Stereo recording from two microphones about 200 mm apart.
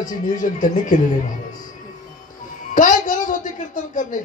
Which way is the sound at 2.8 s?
40° left (ahead or behind).